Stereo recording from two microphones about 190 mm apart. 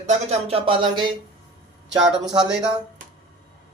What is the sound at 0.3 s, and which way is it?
Speech, 30° right (ahead or behind).